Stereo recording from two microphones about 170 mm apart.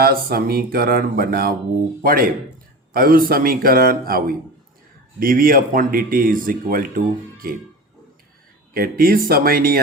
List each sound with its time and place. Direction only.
0.0 s speech: 60° right (ahead or behind)
2.9 s speech: 60° right (ahead or behind)
8.7 s speech: 60° right (ahead or behind)